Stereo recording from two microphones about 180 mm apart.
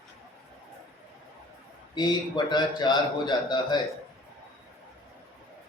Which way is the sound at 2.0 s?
25° left (ahead or behind).